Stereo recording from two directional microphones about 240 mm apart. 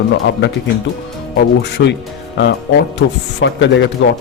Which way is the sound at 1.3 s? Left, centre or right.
Left.